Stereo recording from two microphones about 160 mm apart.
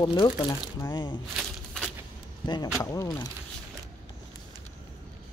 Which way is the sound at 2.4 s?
25° left (ahead or behind).